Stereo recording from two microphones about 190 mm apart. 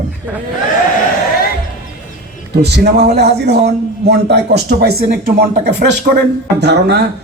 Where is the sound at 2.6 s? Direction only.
60° right (ahead or behind).